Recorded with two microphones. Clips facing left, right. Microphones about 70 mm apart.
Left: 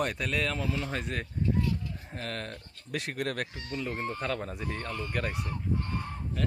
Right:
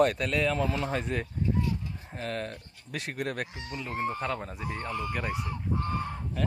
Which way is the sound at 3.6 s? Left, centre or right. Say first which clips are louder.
Right 1 dB; centre.